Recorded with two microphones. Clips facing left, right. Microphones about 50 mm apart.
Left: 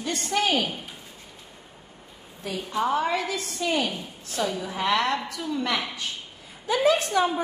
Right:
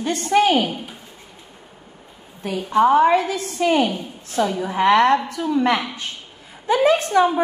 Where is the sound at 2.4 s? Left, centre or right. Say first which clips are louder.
Right 10 dB; right.